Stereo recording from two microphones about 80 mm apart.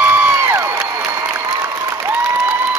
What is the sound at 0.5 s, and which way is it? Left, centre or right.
Crowd, right.